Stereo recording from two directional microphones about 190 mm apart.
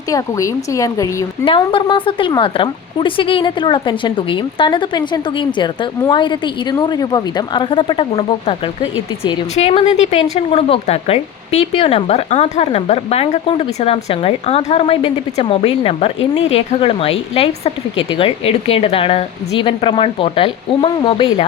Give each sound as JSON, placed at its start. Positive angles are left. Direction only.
{"t": 0.1, "sound": "a woman's voice", "side_deg": 15}